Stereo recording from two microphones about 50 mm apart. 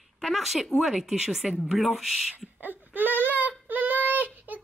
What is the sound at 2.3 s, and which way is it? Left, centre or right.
Child singing, right.